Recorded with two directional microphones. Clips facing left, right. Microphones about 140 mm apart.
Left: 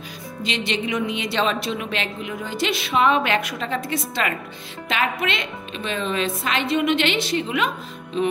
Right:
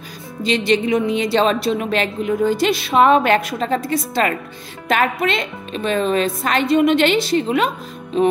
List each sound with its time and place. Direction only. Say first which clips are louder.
0.4 s a woman's voice: right 8 dB; 35° right (ahead or behind)